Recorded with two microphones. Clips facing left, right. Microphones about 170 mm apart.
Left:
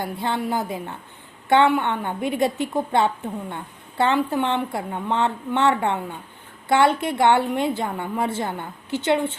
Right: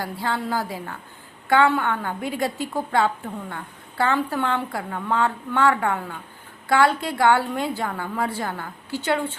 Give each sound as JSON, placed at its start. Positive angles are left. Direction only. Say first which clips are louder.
{"t": 0.0, "sound": "a woman's voice", "louder": "left 2 dB", "side_deg": 20}